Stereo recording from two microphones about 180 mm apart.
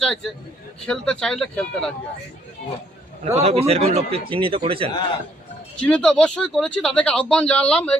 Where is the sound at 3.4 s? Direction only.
35° right (ahead or behind).